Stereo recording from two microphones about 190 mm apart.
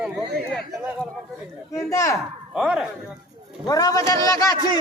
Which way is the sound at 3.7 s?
20° left (ahead or behind).